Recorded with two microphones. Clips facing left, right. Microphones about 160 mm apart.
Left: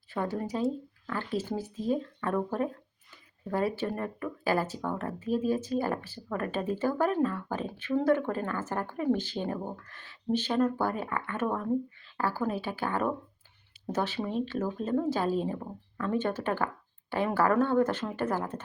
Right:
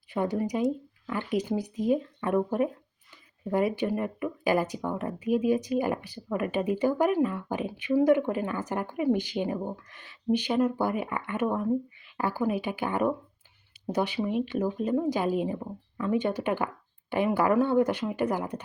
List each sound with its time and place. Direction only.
0.1 s speech: 15° right (ahead or behind)